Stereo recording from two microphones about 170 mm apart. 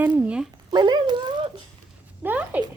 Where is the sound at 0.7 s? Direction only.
25° right (ahead or behind).